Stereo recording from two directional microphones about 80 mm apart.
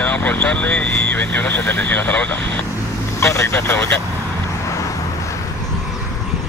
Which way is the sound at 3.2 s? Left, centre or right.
Left.